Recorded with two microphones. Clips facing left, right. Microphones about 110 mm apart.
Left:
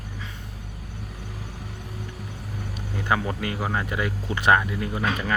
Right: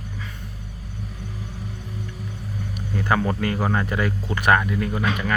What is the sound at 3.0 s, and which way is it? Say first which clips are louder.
Speech: right 3 dB; 10° left (ahead or behind).